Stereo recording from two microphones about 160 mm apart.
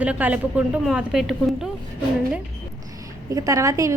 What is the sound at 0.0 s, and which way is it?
A woman's voice, 10° right (ahead or behind).